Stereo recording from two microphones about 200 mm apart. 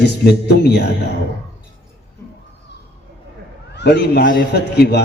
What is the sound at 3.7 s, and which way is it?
A man's voice, 55° left (ahead or behind).